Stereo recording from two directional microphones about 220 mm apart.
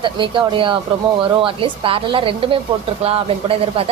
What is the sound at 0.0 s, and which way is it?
Speech, 20° right (ahead or behind).